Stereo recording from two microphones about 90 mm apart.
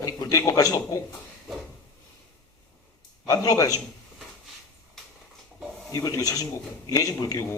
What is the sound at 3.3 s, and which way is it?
Speech, 40° left (ahead or behind).